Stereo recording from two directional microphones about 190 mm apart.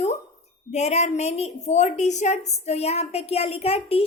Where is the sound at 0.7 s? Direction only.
35° left (ahead or behind).